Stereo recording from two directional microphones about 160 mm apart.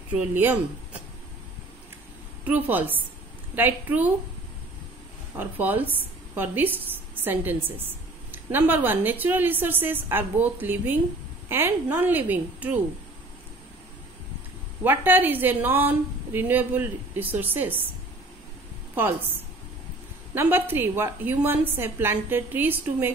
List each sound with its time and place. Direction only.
0.1 s a woman's voice: 10° right (ahead or behind)
2.4 s a woman's voice: 10° right (ahead or behind)
5.4 s a woman's voice: 10° right (ahead or behind)
14.8 s a woman's voice: 10° right (ahead or behind)
18.9 s a woman's voice: 10° right (ahead or behind)